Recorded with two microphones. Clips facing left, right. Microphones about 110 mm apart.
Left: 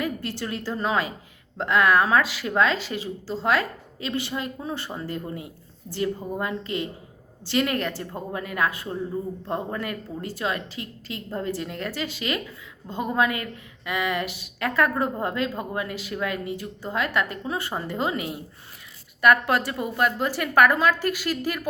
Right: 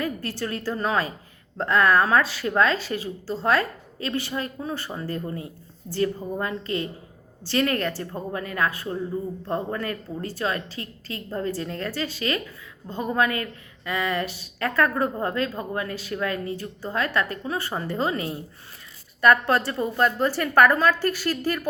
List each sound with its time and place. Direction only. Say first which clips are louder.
0.0 s a woman's voice: even; 20° left (ahead or behind)